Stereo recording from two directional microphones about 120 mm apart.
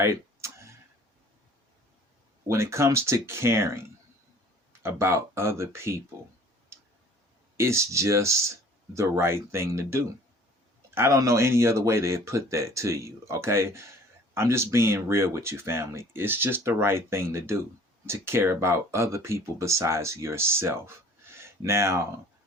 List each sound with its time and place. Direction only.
0.0 s a sound: 25° right (ahead or behind)
2.5 s speech: 25° right (ahead or behind)
7.5 s speech: 25° right (ahead or behind)